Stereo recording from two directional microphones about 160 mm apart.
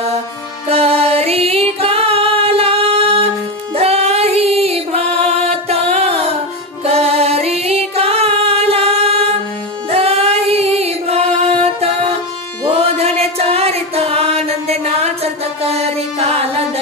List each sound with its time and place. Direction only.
0.7 s music: 40° right (ahead or behind)
12.9 s music: 40° right (ahead or behind)